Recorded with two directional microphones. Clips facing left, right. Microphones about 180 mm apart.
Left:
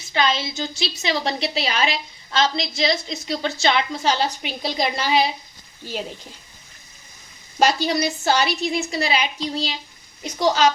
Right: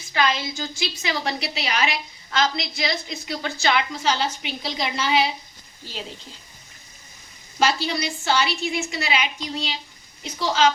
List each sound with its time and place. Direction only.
0.1 s a woman's voice: 25° left (ahead or behind)
7.6 s a woman's voice: 40° left (ahead or behind)